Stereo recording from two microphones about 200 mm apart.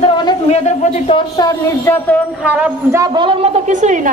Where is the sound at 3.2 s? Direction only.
25° right (ahead or behind).